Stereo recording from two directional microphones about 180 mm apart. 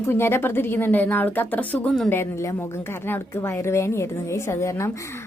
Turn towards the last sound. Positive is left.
turn(degrees=15)  # may be behind; listen again after turning